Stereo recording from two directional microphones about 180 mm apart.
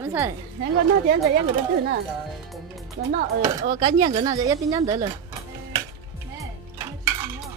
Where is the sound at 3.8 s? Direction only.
25° right (ahead or behind).